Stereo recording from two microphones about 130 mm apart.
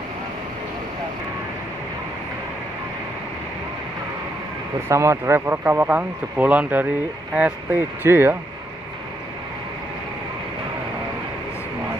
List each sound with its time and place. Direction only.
4.8 s speech: 20° right (ahead or behind)